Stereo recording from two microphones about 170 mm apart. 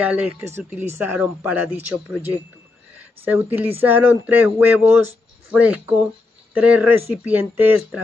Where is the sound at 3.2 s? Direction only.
10° right (ahead or behind).